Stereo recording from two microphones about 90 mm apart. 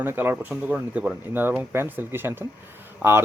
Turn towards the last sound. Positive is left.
turn(degrees=-15)  # may be behind; listen again after turning